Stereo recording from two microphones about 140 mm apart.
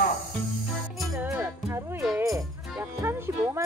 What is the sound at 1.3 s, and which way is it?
Music, 15° right (ahead or behind).